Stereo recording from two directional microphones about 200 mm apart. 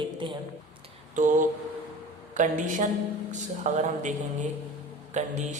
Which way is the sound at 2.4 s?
40° right (ahead or behind).